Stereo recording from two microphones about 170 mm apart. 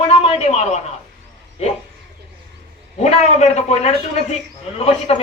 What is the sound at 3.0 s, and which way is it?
Speech, 40° left (ahead or behind).